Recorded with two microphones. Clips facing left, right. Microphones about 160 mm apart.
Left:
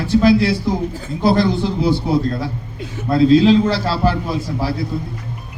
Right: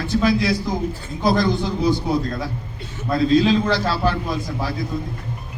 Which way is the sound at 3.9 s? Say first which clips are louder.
Left 3 dB; 30° left (ahead or behind).